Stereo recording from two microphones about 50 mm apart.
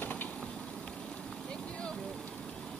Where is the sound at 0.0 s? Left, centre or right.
Left.